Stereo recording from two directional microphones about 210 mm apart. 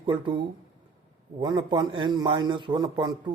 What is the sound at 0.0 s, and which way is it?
A man's voice, 25° right (ahead or behind).